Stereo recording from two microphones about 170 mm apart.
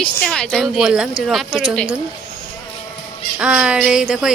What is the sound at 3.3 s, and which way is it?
Speech, 5° right (ahead or behind).